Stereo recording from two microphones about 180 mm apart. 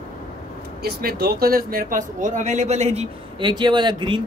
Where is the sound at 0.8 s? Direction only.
60° right (ahead or behind).